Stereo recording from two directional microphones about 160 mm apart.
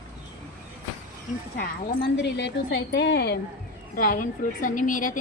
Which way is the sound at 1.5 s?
90° left.